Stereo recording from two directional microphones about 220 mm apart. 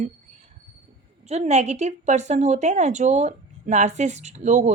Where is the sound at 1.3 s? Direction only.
30° right (ahead or behind).